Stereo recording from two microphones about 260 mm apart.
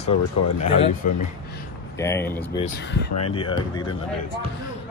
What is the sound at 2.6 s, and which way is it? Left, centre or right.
Speech, left.